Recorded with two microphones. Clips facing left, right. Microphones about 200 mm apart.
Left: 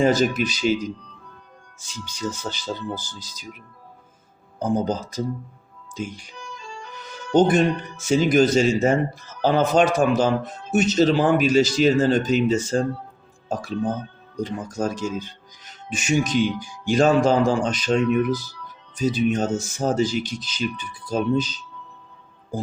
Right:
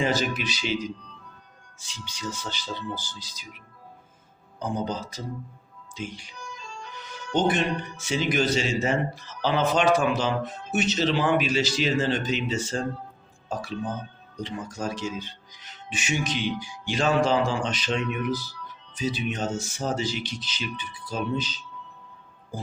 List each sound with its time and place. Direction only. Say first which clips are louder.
0.0 s speech: left 7 dB; 45° left (ahead or behind)
1.8 s speech: left 7 dB; 45° left (ahead or behind)
4.6 s speech: left 6 dB; 45° left (ahead or behind)